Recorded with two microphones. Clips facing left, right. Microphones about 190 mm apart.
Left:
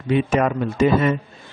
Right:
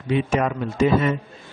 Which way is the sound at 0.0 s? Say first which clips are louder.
Left 3 dB; 55° left (ahead or behind).